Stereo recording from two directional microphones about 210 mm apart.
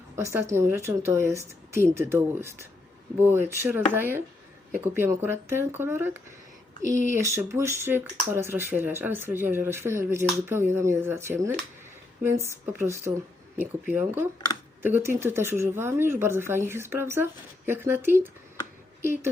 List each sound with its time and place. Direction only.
0.2 s speech: 15° right (ahead or behind)
7.1 s speech: 15° right (ahead or behind)